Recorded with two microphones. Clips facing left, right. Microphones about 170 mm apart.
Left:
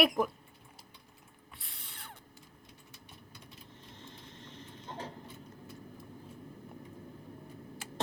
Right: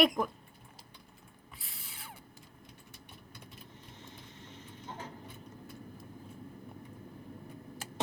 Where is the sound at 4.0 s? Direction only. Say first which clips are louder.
Left 1 dB; 10° right (ahead or behind).